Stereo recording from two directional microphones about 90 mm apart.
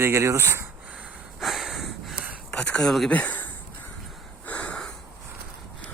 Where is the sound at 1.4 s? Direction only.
Centre (ahead or behind).